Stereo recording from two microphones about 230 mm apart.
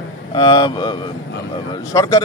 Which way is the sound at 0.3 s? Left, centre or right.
Centre.